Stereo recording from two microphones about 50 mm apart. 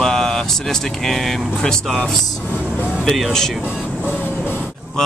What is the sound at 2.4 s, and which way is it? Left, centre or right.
Vehicle, left.